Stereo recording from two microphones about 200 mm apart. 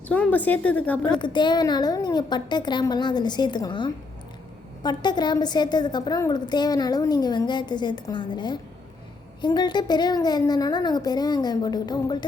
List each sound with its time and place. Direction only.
0.1 s a woman's voice: 5° left (ahead or behind)
1.2 s a woman's voice: 20° left (ahead or behind)